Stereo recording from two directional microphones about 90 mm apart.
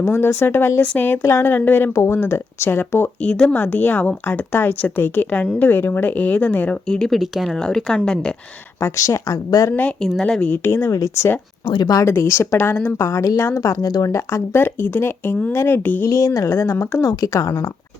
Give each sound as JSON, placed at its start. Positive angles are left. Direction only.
{"t": 0.0, "sound": "speech", "side_deg": 25}
{"t": 1.9, "sound": "speech", "side_deg": 30}
{"t": 3.2, "sound": "speech", "side_deg": 10}
{"t": 6.8, "sound": "speech", "side_deg": 5}
{"t": 8.8, "sound": "speech", "side_deg": 35}
{"t": 10.2, "sound": "speech", "side_deg": 10}
{"t": 10.5, "sound": "speech", "side_deg": 25}
{"t": 10.9, "sound": "speech", "side_deg": 40}
{"t": 11.6, "sound": "speech", "side_deg": 60}
{"t": 11.9, "sound": "speech", "side_deg": 40}
{"t": 12.5, "sound": "speech", "side_deg": 20}
{"t": 13.0, "sound": "speech", "side_deg": 35}
{"t": 16.0, "sound": "speech", "side_deg": 35}